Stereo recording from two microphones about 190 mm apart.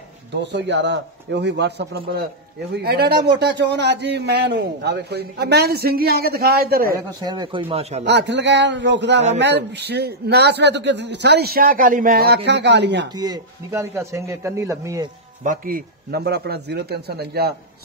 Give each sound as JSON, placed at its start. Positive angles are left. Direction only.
{"t": 0.3, "sound": "a man's voice", "side_deg": -65}
{"t": 7.2, "sound": "speech", "side_deg": -20}
{"t": 8.0, "sound": "a man's voice", "side_deg": -65}
{"t": 13.1, "sound": "a man's voice", "side_deg": -20}
{"t": 15.4, "sound": "a man's voice", "side_deg": -45}